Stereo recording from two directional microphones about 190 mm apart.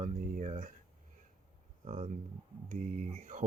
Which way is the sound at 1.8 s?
40° right (ahead or behind).